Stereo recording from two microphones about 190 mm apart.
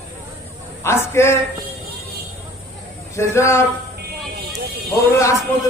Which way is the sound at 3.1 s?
15° left (ahead or behind).